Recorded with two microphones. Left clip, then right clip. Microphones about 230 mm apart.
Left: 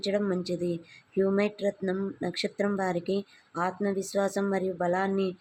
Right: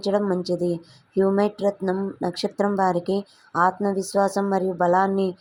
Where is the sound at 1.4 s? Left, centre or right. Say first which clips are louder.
Right 6 dB; centre.